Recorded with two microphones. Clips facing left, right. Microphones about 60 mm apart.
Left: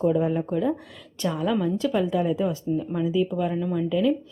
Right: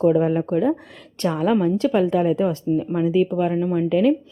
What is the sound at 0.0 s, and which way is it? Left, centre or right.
Speech, right.